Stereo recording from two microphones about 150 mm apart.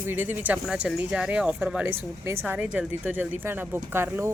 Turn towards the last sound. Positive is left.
turn(degrees=-15)  # may be behind; listen again after turning